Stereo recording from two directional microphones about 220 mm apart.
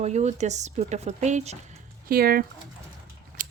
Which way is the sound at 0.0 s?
30° right (ahead or behind).